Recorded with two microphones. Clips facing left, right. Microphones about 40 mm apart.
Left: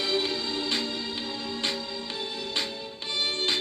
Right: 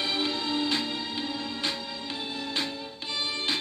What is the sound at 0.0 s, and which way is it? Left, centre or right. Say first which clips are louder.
Music: left 1 dB; right.